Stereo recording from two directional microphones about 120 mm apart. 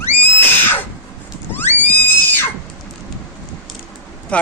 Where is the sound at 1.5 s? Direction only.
15° left (ahead or behind).